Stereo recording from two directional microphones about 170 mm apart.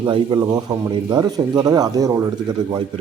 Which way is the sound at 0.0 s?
25° right (ahead or behind).